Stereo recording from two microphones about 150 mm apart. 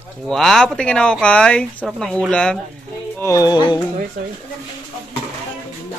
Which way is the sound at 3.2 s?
20° left (ahead or behind).